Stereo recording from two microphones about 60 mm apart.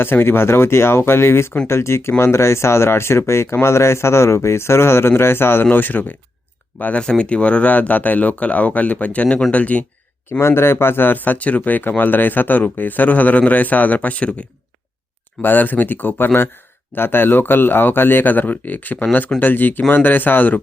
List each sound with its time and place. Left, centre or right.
0.0 s speech: left
5.6 s speech: left
7.0 s speech: centre
10.4 s speech: left
15.4 s speech: left